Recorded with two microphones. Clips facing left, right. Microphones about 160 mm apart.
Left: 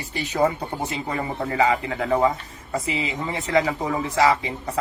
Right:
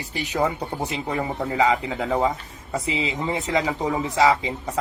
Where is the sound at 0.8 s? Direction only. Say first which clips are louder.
Right 1 dB; 15° right (ahead or behind).